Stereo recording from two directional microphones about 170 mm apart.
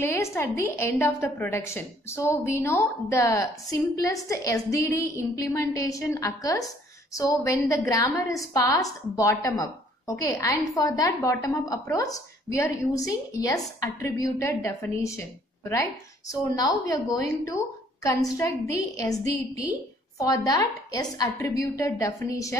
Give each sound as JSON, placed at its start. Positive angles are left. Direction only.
{"t": 0.4, "sound": "a woman's voice", "side_deg": 15}